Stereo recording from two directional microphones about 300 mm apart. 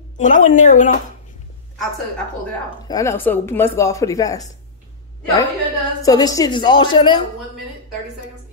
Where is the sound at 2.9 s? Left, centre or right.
Centre.